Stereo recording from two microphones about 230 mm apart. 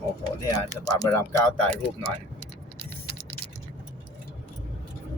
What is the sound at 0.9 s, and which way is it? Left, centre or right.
Speech, centre.